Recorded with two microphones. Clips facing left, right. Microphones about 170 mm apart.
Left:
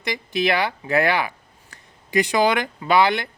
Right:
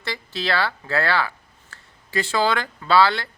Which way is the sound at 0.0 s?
15° left (ahead or behind).